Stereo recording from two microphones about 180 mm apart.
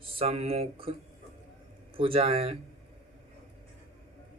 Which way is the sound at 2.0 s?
30° right (ahead or behind).